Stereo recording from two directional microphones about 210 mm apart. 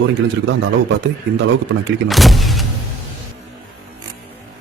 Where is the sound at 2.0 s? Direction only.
Centre (ahead or behind).